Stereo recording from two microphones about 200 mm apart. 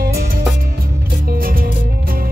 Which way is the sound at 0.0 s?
50° right (ahead or behind).